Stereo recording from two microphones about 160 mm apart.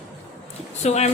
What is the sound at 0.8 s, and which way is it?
Speech, 45° left (ahead or behind).